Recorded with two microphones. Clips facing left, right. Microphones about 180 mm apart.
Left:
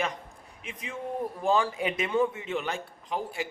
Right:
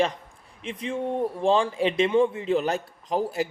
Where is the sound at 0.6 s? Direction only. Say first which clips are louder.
Right 8 dB; 30° right (ahead or behind).